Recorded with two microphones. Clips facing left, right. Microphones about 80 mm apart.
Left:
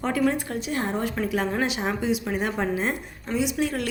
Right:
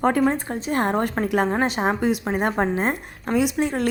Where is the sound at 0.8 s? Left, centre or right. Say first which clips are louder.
Right 6 dB; right.